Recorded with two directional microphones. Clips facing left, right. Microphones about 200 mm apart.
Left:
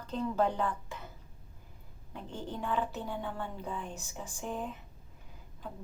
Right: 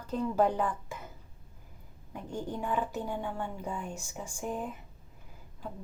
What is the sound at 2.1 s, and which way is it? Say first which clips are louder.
A woman's voice: right 4 dB; 15° right (ahead or behind).